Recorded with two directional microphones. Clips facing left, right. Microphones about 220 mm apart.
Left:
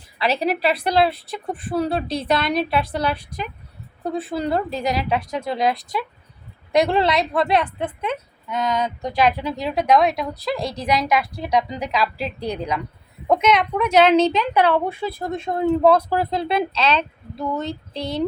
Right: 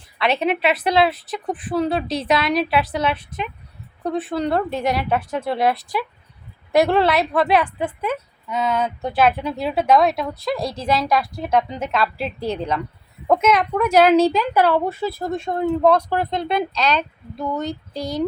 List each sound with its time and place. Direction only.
0.4 s a woman's voice: centre (ahead or behind)
10.8 s speech: 15° left (ahead or behind)
11.1 s a woman's voice: centre (ahead or behind)
12.5 s speech: 10° left (ahead or behind)
13.2 s a woman's voice: 5° right (ahead or behind)
17.7 s speech: 25° left (ahead or behind)